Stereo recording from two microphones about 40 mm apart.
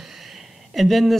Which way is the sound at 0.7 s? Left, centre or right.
Centre.